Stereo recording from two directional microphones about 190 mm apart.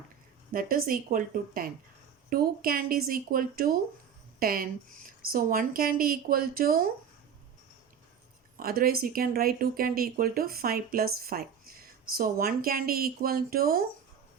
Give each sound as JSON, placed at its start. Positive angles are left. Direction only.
{"t": 0.5, "sound": "speech", "side_deg": -50}
{"t": 8.5, "sound": "speech", "side_deg": -50}